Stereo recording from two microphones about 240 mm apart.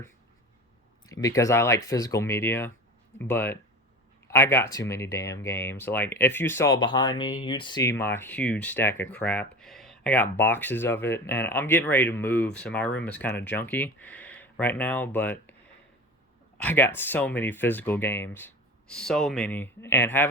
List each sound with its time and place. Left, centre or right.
1.0 s speech: centre
16.6 s speech: centre